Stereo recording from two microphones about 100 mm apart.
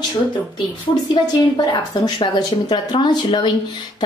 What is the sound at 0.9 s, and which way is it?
A woman's voice, 40° left (ahead or behind).